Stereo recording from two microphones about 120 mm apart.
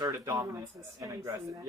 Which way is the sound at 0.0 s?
25° right (ahead or behind).